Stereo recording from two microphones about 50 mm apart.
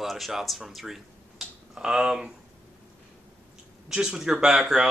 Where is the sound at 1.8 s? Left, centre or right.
Centre.